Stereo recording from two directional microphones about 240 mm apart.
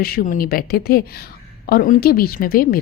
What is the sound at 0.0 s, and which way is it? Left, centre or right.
Speech, left.